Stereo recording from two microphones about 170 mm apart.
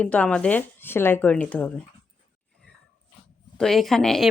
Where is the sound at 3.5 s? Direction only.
Centre (ahead or behind).